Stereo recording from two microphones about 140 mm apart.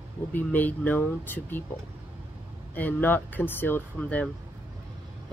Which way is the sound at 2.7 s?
15° left (ahead or behind).